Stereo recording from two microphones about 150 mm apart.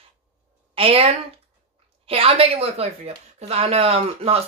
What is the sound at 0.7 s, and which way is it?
Speech, 40° right (ahead or behind).